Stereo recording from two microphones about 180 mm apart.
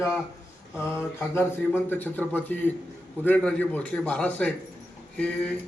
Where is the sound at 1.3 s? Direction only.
10° left (ahead or behind).